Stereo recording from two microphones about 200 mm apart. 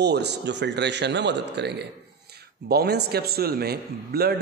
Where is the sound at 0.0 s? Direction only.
55° right (ahead or behind).